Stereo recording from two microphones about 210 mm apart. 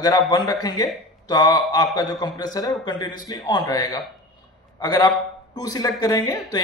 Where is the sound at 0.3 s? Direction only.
20° left (ahead or behind).